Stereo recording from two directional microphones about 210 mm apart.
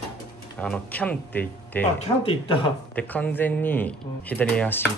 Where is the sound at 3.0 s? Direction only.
5° left (ahead or behind).